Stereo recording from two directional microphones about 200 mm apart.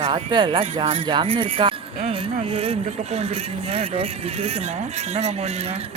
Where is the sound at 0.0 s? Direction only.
25° right (ahead or behind).